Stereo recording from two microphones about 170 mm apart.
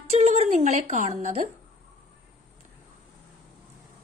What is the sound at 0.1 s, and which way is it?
Speech, 40° right (ahead or behind).